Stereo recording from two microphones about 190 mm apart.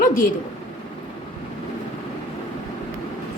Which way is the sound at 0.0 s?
45° left (ahead or behind).